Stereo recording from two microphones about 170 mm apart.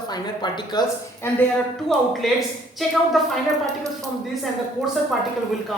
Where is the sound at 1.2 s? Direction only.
10° left (ahead or behind).